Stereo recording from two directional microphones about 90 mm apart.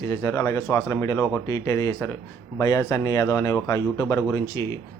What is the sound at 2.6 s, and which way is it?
A man's voice, 40° left (ahead or behind).